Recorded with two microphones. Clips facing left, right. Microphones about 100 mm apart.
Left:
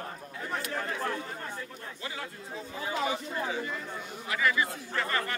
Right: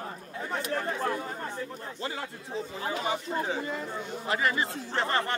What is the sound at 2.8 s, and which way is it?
Speech, 30° right (ahead or behind).